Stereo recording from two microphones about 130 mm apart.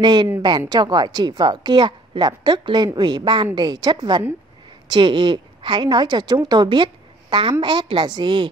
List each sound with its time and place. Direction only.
0.0 s a woman's voice: 35° right (ahead or behind)